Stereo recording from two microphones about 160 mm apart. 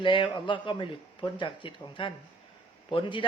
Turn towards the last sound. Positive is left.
turn(degrees=30)  # may be behind; listen again after turning